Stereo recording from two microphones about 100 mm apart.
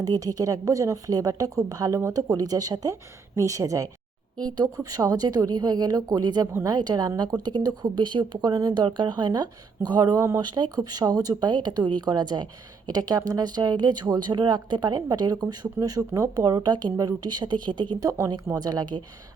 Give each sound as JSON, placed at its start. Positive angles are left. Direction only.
{"t": 0.0, "sound": "a woman's voice", "side_deg": -40}
{"t": 18.0, "sound": "a woman's voice", "side_deg": -35}